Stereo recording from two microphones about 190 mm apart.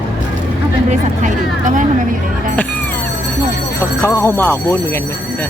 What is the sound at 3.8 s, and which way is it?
Speech, 15° left (ahead or behind).